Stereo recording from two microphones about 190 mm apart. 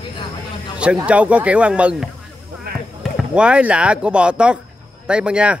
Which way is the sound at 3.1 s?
5° right (ahead or behind).